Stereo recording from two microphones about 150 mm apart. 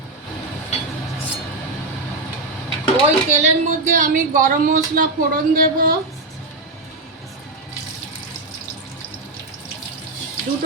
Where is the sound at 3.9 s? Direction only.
60° right (ahead or behind).